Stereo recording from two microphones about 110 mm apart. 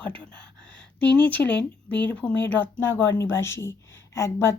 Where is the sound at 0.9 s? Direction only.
10° left (ahead or behind).